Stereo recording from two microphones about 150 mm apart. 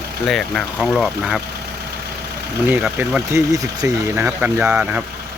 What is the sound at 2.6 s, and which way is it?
Speech, 10° right (ahead or behind).